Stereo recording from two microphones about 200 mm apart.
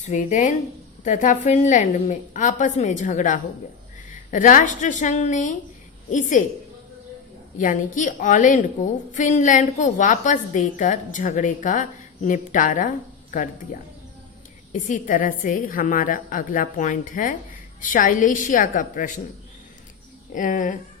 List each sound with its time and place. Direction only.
0.0 s a woman's voice: 40° left (ahead or behind)
7.6 s a woman's voice: 40° left (ahead or behind)
14.7 s a woman's voice: 40° left (ahead or behind)
20.3 s a woman's voice: 40° left (ahead or behind)